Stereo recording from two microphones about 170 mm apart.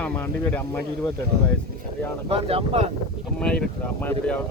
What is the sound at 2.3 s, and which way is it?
Speech, 35° right (ahead or behind).